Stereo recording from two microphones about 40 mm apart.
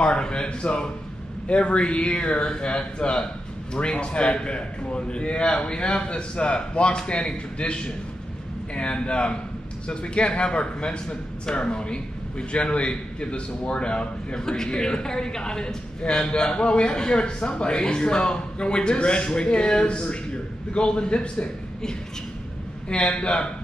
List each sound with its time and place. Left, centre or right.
0.0 s a man's voice: left
22.8 s a man's voice: left